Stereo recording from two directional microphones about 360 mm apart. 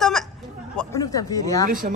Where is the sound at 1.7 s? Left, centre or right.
Right.